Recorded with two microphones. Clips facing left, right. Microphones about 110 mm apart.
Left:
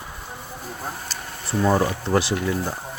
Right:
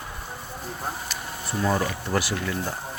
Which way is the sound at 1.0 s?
30° left (ahead or behind).